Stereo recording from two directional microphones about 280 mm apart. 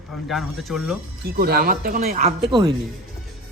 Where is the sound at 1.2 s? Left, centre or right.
Right.